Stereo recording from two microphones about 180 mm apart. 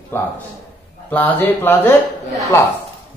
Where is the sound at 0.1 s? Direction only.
10° left (ahead or behind).